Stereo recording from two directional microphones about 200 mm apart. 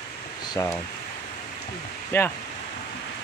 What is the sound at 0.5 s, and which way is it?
Speech, 20° left (ahead or behind).